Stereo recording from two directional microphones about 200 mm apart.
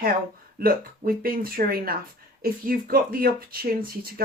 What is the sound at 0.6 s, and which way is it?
Speech, 45° right (ahead or behind).